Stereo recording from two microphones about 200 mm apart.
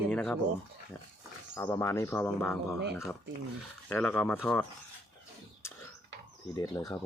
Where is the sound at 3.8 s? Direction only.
10° left (ahead or behind).